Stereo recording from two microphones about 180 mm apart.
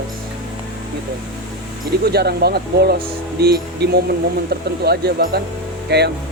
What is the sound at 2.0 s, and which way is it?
Speech, 60° right (ahead or behind).